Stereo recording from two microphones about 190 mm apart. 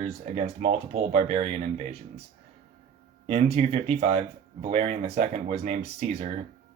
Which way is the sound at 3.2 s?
35° right (ahead or behind).